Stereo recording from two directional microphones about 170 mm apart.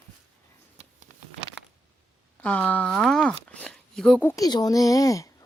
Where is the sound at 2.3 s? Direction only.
10° left (ahead or behind).